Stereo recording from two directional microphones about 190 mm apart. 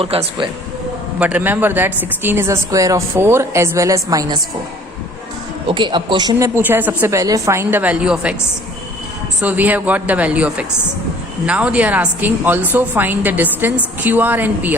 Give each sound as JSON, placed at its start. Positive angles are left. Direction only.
{"t": 0.0, "sound": "speech", "side_deg": -30}
{"t": 1.2, "sound": "a woman's voice", "side_deg": -10}
{"t": 5.6, "sound": "speech", "side_deg": -25}
{"t": 6.6, "sound": "a woman's voice", "side_deg": -10}
{"t": 9.4, "sound": "a woman's voice", "side_deg": -10}